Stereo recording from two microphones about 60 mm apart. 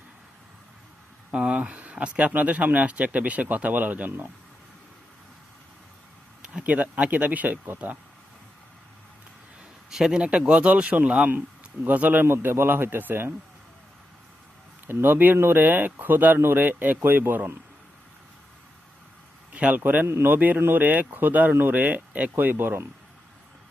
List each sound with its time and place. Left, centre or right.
1.3 s speech: right
6.4 s speech: centre
9.9 s speech: centre; by 12.2 s right
12.2 s speech: right
14.8 s speech: right
19.5 s speech: right
20.1 s speech: right
20.3 s speech: right